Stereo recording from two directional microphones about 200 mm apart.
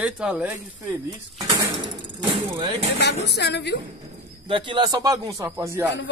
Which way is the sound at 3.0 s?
55° left (ahead or behind).